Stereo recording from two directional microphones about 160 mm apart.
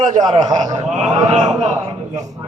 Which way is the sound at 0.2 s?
25° right (ahead or behind).